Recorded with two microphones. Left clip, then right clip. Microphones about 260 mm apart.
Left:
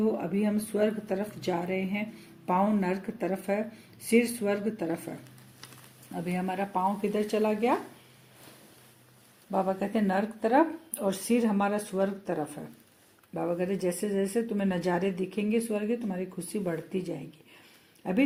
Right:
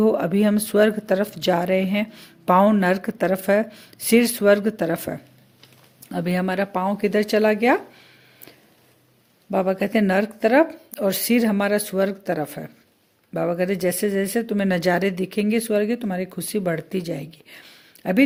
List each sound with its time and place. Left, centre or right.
0.0 s speech: right
6.1 s speech: right
9.5 s speech: right